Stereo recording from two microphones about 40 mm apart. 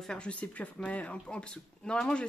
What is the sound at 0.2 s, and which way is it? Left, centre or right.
Speech, left.